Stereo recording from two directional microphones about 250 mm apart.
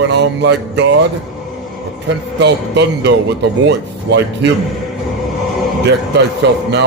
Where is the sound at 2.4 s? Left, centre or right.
Right.